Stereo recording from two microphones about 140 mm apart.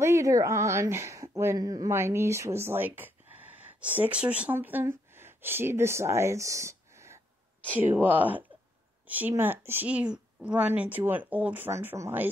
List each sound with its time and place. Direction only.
0.0 s a woman's voice: 20° right (ahead or behind)